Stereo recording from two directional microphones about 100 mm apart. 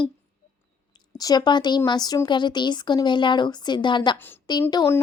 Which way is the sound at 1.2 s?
40° left (ahead or behind).